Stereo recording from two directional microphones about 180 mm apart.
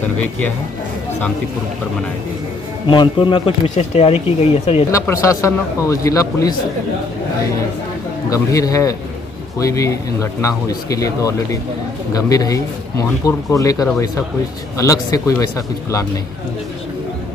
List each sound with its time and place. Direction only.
2.9 s speech: 25° left (ahead or behind)
4.9 s speech: 15° left (ahead or behind)
8.3 s speech: 20° left (ahead or behind)